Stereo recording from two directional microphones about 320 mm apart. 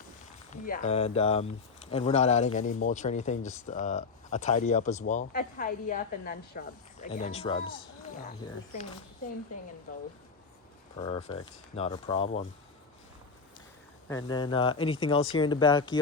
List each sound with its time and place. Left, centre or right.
0.6 s speech: left
7.6 s speech: left
11.0 s speech: centre
14.1 s speech: centre